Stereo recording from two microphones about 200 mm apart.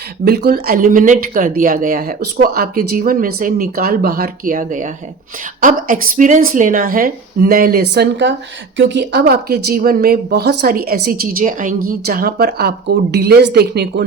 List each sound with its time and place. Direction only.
0.3 s speech: 50° right (ahead or behind)